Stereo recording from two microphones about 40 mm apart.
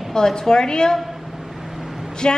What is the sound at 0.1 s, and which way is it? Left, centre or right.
Speech, centre.